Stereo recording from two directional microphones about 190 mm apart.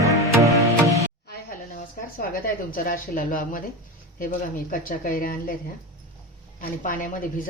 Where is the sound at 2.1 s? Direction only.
50° left (ahead or behind).